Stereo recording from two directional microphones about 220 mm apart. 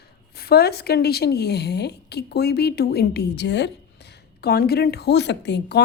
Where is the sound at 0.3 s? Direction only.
45° left (ahead or behind).